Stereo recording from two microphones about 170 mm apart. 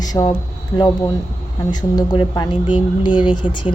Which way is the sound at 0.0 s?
20° left (ahead or behind).